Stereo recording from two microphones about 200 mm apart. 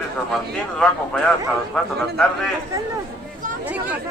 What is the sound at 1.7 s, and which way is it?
Speech, 5° left (ahead or behind).